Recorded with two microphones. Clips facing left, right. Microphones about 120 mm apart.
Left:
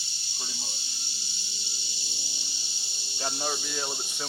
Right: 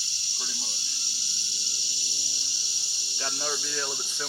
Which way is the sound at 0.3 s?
20° left (ahead or behind).